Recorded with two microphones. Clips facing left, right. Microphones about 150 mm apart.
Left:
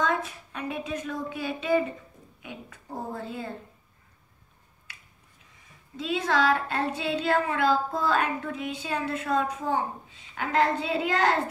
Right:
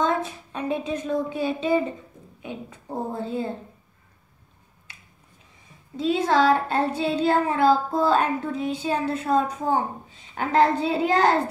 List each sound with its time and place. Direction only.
0.0 s a woman's voice: 30° right (ahead or behind)
4.9 s finger snapping: 25° right (ahead or behind)
5.9 s child singing: 35° right (ahead or behind)